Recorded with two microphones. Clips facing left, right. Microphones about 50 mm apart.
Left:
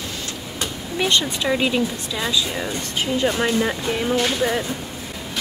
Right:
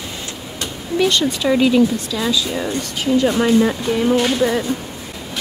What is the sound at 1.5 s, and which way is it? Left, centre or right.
A woman's voice, centre.